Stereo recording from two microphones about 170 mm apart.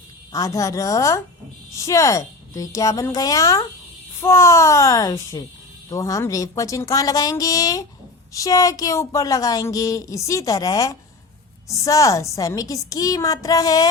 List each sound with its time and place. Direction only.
0.3 s a woman's voice: 20° left (ahead or behind)